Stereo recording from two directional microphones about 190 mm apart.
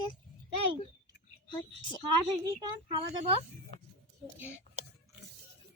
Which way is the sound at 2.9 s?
25° right (ahead or behind).